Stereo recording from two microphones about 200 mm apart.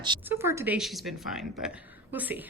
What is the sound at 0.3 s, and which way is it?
A woman's voice, 10° right (ahead or behind).